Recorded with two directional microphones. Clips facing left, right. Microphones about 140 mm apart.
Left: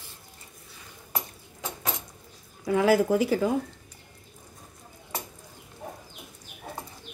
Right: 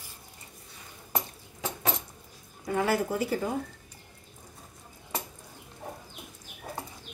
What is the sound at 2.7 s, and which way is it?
Speech, 90° left.